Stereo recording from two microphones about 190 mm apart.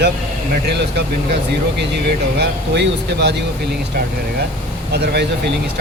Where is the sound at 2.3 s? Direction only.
65° right (ahead or behind).